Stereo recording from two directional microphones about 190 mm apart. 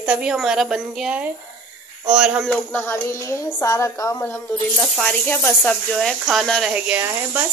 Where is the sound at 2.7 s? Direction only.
10° left (ahead or behind).